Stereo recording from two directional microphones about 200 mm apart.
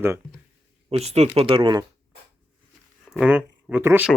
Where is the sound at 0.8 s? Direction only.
30° right (ahead or behind).